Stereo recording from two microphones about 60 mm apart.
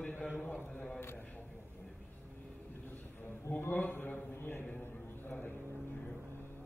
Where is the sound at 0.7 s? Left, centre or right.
Centre.